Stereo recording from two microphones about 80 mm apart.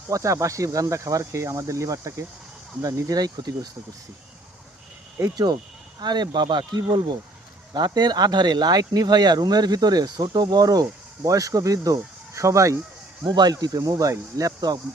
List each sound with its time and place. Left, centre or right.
0.1 s speech: right
2.8 s speech: right
5.2 s speech: right
6.0 s speech: right
13.2 s speech: right